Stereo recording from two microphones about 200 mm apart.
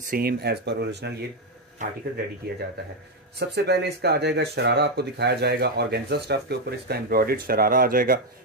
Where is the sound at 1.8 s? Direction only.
40° right (ahead or behind).